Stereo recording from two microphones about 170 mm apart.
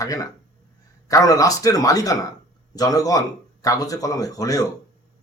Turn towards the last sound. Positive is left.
turn(degrees=20)  # may be behind; listen again after turning